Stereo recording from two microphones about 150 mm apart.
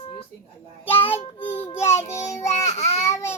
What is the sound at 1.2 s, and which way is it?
Child singing, 45° left (ahead or behind).